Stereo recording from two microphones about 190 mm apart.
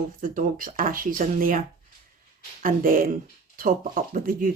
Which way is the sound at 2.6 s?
45° right (ahead or behind).